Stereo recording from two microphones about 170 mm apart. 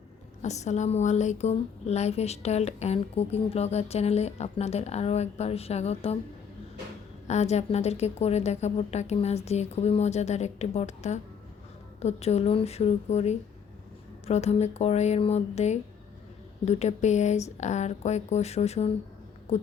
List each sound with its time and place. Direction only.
0.4 s speech: 40° left (ahead or behind)
7.3 s speech: 40° left (ahead or behind)